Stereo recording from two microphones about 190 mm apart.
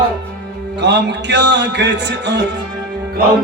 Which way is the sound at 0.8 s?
65° right (ahead or behind).